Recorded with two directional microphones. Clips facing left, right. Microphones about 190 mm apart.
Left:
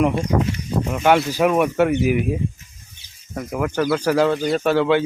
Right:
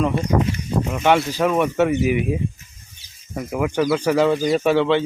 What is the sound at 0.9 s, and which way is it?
Speech, centre (ahead or behind).